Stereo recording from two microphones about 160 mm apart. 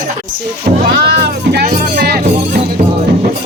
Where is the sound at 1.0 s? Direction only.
90° right; by 2.2 s 75° right (ahead or behind).